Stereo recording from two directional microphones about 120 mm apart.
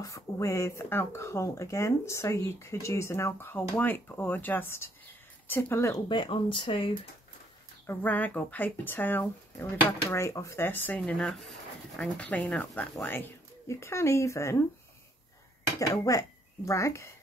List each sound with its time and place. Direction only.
0.0 s speech: 25° left (ahead or behind)
6.0 s speech: 45° left (ahead or behind)
7.8 s speech: 15° left (ahead or behind)
10.0 s speech: 25° left (ahead or behind)
11.0 s speech: 5° left (ahead or behind); by 14.6 s 25° left (ahead or behind)
15.6 s speech: 30° left (ahead or behind)